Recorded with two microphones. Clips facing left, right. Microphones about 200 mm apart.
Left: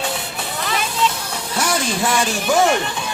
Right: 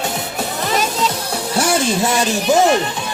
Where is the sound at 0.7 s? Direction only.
40° right (ahead or behind).